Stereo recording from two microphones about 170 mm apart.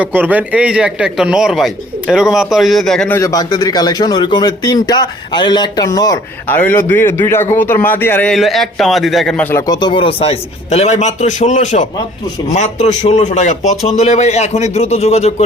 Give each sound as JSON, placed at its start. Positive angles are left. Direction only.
{"t": 0.0, "sound": "speech", "side_deg": -10}
{"t": 3.2, "sound": "a man's voice", "side_deg": 20}
{"t": 13.0, "sound": "a man's voice", "side_deg": 45}